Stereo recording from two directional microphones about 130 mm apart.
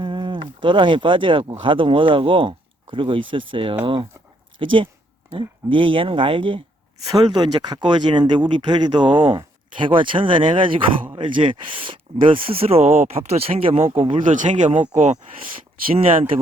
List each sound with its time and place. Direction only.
0.0 s speech: 40° right (ahead or behind)
14.3 s speech: 70° right (ahead or behind)